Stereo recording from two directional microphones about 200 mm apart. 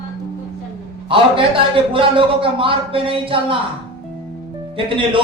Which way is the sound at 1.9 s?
25° right (ahead or behind).